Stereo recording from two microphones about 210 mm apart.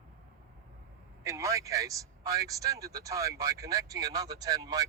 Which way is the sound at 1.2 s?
15° right (ahead or behind).